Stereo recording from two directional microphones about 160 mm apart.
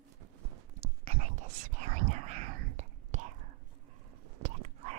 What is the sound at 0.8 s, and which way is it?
Whispering, 40° right (ahead or behind).